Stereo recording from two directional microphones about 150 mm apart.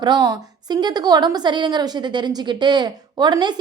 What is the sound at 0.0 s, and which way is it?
A woman's voice, 30° right (ahead or behind).